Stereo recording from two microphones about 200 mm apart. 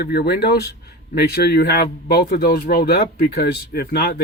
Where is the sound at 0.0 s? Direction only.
55° left (ahead or behind).